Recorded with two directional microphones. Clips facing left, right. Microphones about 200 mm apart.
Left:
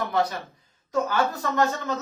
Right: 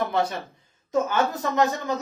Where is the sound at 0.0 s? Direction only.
25° right (ahead or behind).